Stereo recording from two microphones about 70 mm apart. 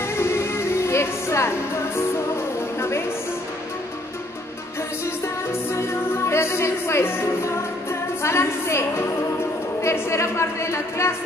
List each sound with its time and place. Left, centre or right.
0.1 s music: left
5.5 s music: left
9.8 s speech: left